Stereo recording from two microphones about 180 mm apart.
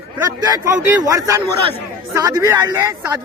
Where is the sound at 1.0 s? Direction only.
20° right (ahead or behind).